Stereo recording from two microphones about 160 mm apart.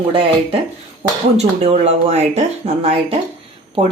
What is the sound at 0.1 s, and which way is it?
Speech, 35° right (ahead or behind).